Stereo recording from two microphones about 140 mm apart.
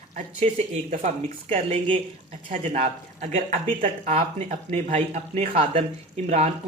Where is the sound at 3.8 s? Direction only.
45° right (ahead or behind).